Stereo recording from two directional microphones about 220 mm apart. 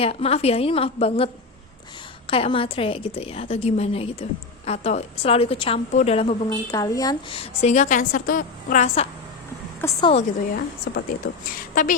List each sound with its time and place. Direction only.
0.0 s a woman's voice: 25° left (ahead or behind)
6.5 s a woman's voice: 15° left (ahead or behind); by 9.0 s 35° left (ahead or behind)
9.8 s a woman's voice: 25° left (ahead or behind)
10.9 s a woman's voice: 45° left (ahead or behind)